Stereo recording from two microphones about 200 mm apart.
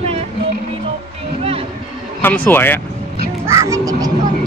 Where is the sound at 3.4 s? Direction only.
15° right (ahead or behind).